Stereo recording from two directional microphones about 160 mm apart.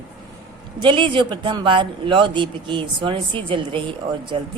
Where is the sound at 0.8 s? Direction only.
30° right (ahead or behind).